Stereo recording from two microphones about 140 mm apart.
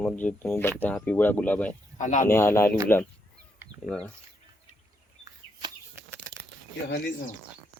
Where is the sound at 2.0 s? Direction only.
65° left (ahead or behind).